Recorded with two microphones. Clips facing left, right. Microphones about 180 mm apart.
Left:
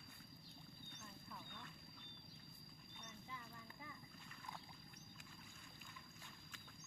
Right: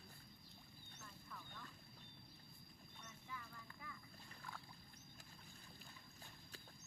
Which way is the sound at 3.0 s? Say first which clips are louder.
Even; 20° left (ahead or behind).